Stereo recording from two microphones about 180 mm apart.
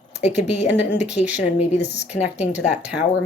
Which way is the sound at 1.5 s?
40° left (ahead or behind).